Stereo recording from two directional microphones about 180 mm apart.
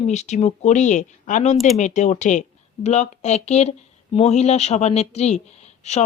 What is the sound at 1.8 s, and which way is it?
Speech, 40° left (ahead or behind).